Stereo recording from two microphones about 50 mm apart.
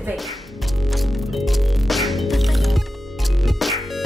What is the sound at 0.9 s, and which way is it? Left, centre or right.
Music, centre.